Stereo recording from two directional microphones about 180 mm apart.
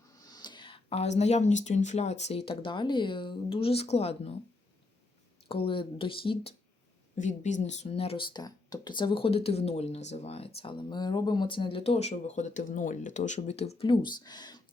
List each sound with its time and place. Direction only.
0.2 s speech: 20° left (ahead or behind)
5.5 s speech: 30° left (ahead or behind)
7.2 s speech: 45° left (ahead or behind); by 14.6 s 25° left (ahead or behind)